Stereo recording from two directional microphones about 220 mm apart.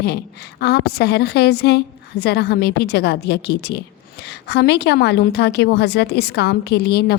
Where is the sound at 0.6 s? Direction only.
45° left (ahead or behind).